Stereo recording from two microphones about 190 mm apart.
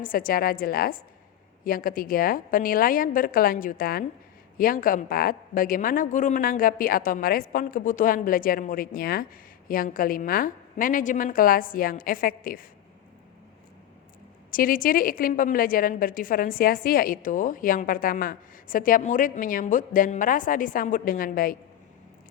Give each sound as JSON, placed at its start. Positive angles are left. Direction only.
{"t": 0.0, "sound": "a woman's voice", "side_deg": 50}
{"t": 14.5, "sound": "a woman's voice", "side_deg": 45}